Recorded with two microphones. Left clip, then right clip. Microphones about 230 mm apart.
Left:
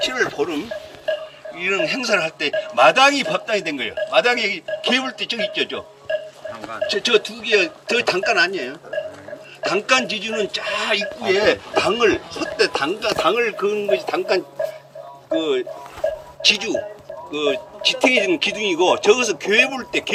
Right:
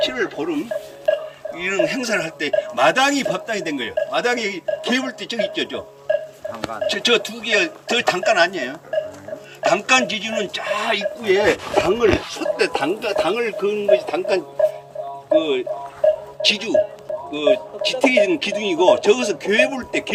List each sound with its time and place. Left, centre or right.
0.0 s speech: centre
1.5 s a man's voice: centre
6.5 s a sound: right
6.8 s a man's voice: centre
11.8 s speech: left
12.4 s a man's voice: centre